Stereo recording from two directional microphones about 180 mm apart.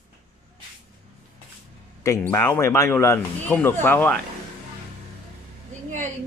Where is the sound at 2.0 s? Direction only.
15° left (ahead or behind).